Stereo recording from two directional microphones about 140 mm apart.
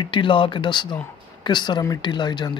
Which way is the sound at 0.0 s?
35° left (ahead or behind).